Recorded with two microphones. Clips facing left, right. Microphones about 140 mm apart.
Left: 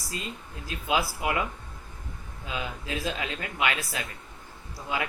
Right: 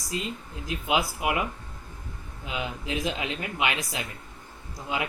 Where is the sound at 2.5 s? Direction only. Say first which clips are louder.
Right 2 dB; 20° right (ahead or behind).